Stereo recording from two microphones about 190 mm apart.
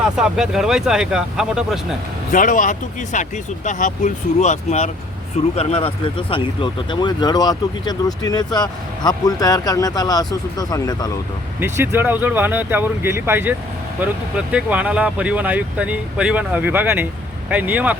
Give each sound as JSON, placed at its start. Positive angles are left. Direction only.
{"t": 0.0, "sound": "speech", "side_deg": -5}
{"t": 2.3, "sound": "speech", "side_deg": 45}
{"t": 11.6, "sound": "speech", "side_deg": -10}